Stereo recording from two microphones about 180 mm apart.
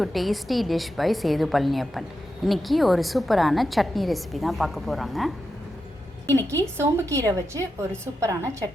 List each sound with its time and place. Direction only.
0.0 s a woman's voice: centre (ahead or behind)
6.7 s a woman's voice: 15° right (ahead or behind)